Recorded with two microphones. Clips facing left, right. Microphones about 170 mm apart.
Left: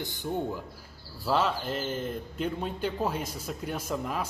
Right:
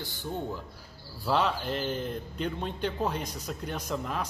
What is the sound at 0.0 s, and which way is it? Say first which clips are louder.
Speech: left 3 dB; 20° left (ahead or behind).